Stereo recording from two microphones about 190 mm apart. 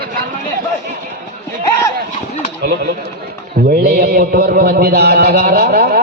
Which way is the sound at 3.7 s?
55° right (ahead or behind).